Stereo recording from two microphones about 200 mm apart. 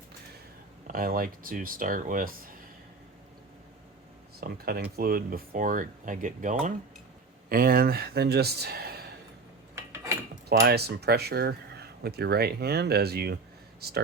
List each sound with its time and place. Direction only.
0.9 s speech: 45° right (ahead or behind)
4.4 s speech: 50° right (ahead or behind)
9.7 s cutlery: 15° right (ahead or behind)
10.6 s speech: 55° right (ahead or behind)